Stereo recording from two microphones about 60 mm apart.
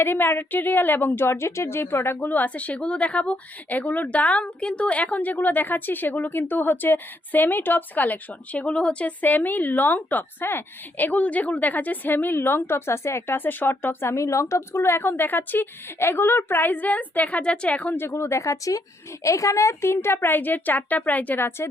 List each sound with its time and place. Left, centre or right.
0.0 s a woman's voice: left
2.3 s a woman's voice: left
9.2 s a woman's voice: left
17.9 s a woman's voice: left
20.1 s a woman's voice: left
21.3 s a woman's voice: left